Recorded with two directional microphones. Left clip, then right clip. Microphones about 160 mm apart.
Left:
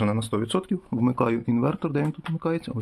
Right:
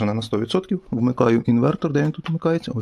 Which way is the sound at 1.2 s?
30° right (ahead or behind).